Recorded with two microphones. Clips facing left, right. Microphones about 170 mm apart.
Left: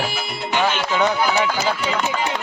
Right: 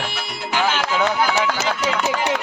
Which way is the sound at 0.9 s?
Centre (ahead or behind).